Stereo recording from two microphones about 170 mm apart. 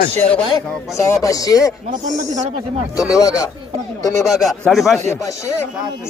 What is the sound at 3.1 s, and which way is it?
Speech, 20° left (ahead or behind).